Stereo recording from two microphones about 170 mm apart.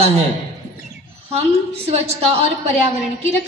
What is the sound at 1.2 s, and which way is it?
A man's voice, 35° right (ahead or behind).